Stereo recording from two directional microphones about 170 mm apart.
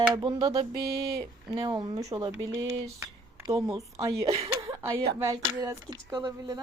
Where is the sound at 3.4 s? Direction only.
20° right (ahead or behind).